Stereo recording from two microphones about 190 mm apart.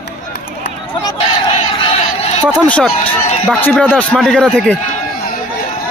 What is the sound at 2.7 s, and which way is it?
A man's voice, 5° left (ahead or behind).